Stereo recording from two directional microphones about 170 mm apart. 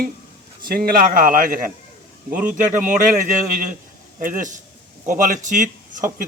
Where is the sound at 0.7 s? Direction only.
60° right (ahead or behind).